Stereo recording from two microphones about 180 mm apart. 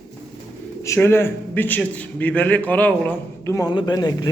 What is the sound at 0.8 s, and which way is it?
A man's voice, 15° left (ahead or behind).